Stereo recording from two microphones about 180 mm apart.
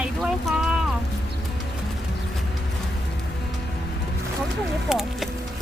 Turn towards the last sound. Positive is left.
turn(degrees=-5)  # may be behind; listen again after turning